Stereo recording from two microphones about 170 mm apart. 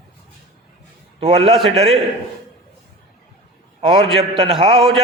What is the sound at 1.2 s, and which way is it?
Speech, 35° right (ahead or behind).